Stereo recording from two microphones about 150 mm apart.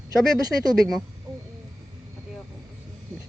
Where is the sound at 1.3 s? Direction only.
20° right (ahead or behind).